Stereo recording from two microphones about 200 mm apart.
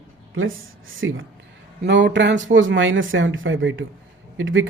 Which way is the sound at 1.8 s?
60° right (ahead or behind).